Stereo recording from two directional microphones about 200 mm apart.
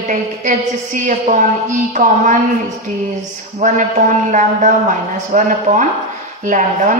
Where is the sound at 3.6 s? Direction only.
35° right (ahead or behind).